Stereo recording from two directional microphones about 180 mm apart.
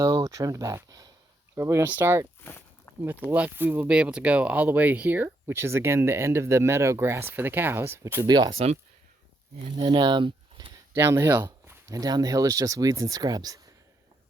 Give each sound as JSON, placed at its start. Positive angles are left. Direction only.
{"t": 0.0, "sound": "speech", "side_deg": -20}
{"t": 2.4, "sound": "walk", "side_deg": 10}
{"t": 3.2, "sound": "speech", "side_deg": -10}
{"t": 9.7, "sound": "speech", "side_deg": -25}
{"t": 10.9, "sound": "speech", "side_deg": -15}